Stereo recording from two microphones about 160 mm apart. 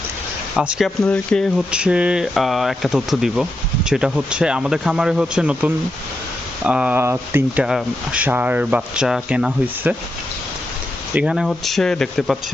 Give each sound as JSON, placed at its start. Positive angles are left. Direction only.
{"t": 0.5, "sound": "speech", "side_deg": -5}
{"t": 1.7, "sound": "speech", "side_deg": -5}
{"t": 11.1, "sound": "speech", "side_deg": -5}